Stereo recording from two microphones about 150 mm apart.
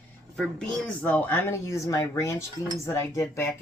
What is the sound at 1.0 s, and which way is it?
Speech, 10° left (ahead or behind).